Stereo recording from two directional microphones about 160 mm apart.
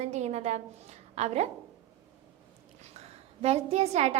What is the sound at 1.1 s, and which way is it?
Speech, 45° right (ahead or behind).